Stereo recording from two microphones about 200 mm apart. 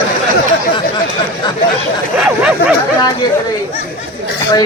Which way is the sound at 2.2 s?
5° right (ahead or behind).